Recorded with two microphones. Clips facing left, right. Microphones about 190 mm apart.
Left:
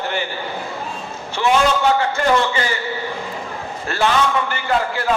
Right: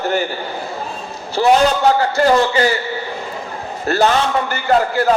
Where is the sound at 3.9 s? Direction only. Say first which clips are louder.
Right 3 dB; 40° right (ahead or behind).